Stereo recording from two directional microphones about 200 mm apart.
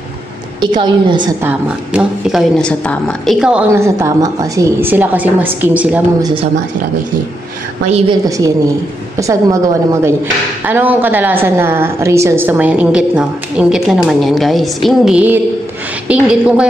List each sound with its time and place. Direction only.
0.7 s a woman's voice: 25° right (ahead or behind)
1.4 s speech: 5° right (ahead or behind)
6.2 s a woman's voice: 25° right (ahead or behind)
7.8 s a woman's voice: 30° right (ahead or behind)
8.3 s speech: 15° right (ahead or behind)
10.6 s a woman's voice: 10° right (ahead or behind)